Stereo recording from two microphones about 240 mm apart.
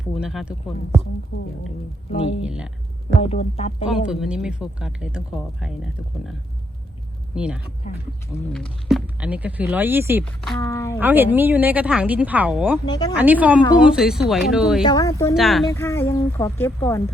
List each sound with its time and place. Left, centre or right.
0.2 s speech: centre
2.4 s speech: centre
3.2 s speech: left
3.8 s speech: centre
7.3 s speech: centre
7.8 s speech: left
8.5 s speech: centre
10.6 s speech: centre
11.0 s speech: centre
12.8 s speech: centre
13.1 s speech: centre
14.8 s speech: centre
15.4 s speech: centre
15.7 s speech: centre